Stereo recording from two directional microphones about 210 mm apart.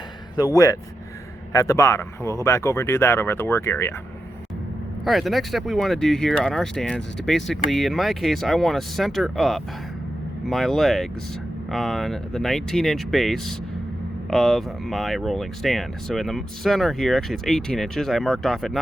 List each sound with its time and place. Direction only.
0.3 s speech: 15° left (ahead or behind)
5.0 s speech: centre (ahead or behind)